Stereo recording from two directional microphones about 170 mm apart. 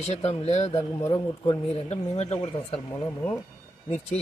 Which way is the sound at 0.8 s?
15° left (ahead or behind).